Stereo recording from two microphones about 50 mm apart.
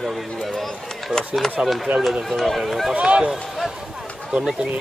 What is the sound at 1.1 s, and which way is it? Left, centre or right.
Speech, centre.